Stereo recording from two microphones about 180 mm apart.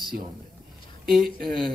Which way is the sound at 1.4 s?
Centre (ahead or behind).